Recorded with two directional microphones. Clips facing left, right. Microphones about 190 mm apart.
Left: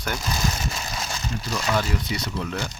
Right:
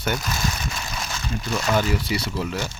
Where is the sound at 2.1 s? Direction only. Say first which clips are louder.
Right 4 dB; 10° right (ahead or behind).